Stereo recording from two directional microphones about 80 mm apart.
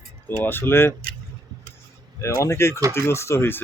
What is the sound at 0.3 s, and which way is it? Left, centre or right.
Speech, left.